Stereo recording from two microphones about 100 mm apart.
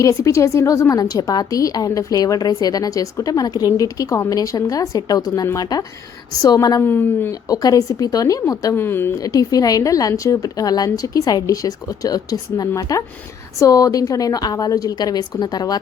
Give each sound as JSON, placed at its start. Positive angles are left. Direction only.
{"t": 0.0, "sound": "speech", "side_deg": 30}
{"t": 6.8, "sound": "speech", "side_deg": 20}
{"t": 7.4, "sound": "speech", "side_deg": 40}
{"t": 8.7, "sound": "speech", "side_deg": 20}
{"t": 9.1, "sound": "speech", "side_deg": 35}